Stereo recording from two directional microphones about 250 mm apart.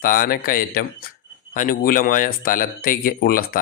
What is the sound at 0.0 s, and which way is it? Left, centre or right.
Speech, left.